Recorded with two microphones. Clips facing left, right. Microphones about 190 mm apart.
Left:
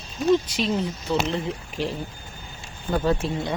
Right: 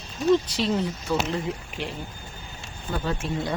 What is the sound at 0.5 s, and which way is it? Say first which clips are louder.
Speech: even; 20° left (ahead or behind).